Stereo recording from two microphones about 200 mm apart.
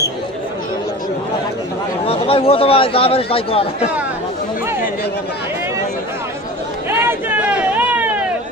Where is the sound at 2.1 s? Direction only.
30° left (ahead or behind).